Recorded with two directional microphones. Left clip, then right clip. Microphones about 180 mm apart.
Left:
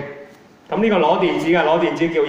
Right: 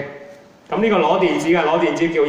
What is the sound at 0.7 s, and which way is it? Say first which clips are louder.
Speech: even; 25° left (ahead or behind).